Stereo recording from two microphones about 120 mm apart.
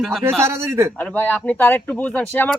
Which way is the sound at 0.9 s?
15° left (ahead or behind).